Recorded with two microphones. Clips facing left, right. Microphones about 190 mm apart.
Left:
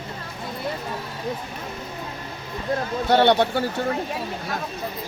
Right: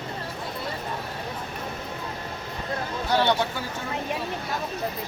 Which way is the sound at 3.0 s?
65° left (ahead or behind).